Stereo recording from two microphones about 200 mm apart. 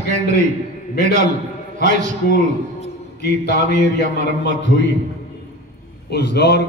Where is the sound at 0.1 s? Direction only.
35° right (ahead or behind).